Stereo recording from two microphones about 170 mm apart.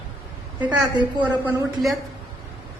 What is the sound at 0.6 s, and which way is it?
A woman's voice, 10° right (ahead or behind).